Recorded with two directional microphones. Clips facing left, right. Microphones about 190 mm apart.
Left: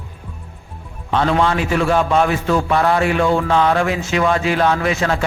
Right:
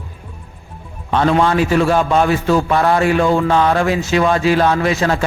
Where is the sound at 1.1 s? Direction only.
45° right (ahead or behind).